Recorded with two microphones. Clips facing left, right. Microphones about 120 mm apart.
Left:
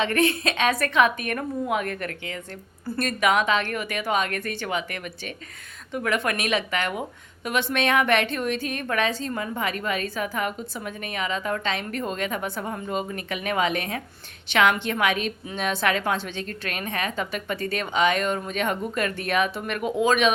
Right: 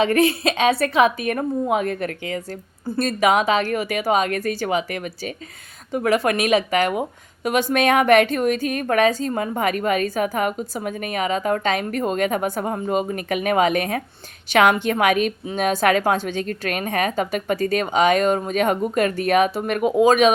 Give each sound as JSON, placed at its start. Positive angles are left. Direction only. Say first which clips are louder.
{"t": 0.0, "sound": "a woman's voice", "louder": "right 5 dB", "side_deg": -35}
{"t": 3.2, "sound": "a woman's voice", "louder": "right 4 dB", "side_deg": -35}